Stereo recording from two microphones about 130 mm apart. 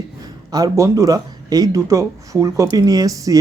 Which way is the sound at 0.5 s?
25° right (ahead or behind).